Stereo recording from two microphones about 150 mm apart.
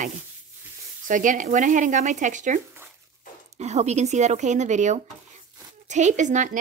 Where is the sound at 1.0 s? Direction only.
60° right (ahead or behind).